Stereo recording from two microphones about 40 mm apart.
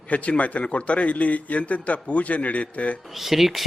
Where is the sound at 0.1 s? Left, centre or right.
Left.